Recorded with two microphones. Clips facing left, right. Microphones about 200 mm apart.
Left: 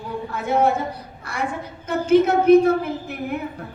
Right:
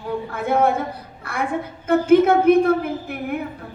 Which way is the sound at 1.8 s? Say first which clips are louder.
Right 3 dB; 55° right (ahead or behind).